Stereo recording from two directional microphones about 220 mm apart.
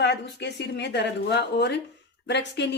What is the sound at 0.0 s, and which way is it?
A woman's voice, 50° left (ahead or behind).